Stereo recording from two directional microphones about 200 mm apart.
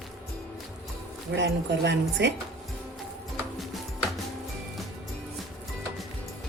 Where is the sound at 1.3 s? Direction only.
60° right (ahead or behind).